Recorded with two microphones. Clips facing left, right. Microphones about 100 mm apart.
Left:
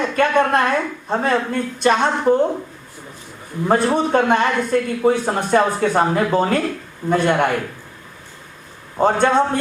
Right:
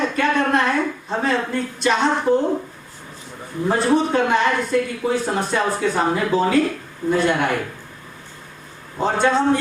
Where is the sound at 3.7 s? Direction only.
55° left (ahead or behind).